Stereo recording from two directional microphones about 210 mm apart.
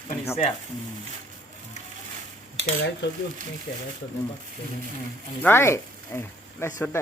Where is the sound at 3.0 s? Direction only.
55° left (ahead or behind).